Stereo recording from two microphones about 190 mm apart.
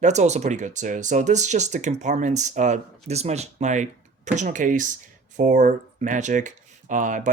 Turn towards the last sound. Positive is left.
turn(degrees=-40)  # may be behind; listen again after turning